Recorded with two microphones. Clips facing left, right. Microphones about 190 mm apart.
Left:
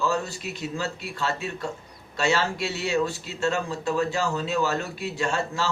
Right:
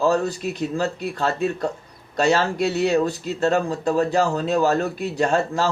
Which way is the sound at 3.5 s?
40° right (ahead or behind).